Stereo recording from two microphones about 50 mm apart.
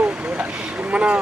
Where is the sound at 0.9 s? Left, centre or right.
Right.